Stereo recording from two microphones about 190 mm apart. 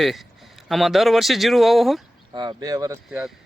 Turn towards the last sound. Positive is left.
turn(degrees=-5)  # may be behind; listen again after turning